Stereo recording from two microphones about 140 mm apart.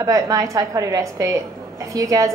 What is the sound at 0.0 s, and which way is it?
A woman's voice, 25° right (ahead or behind).